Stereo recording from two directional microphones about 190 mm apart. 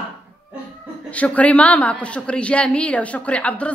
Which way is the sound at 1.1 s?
5° left (ahead or behind).